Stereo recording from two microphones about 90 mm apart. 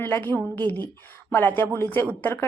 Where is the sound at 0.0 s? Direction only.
20° left (ahead or behind).